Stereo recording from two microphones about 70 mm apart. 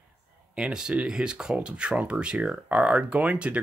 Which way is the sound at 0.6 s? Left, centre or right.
Centre.